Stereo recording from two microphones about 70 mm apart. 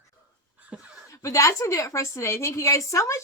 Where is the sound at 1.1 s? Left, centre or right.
Left.